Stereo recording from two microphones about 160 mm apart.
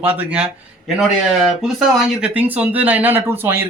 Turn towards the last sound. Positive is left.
turn(degrees=-15)  # may be behind; listen again after turning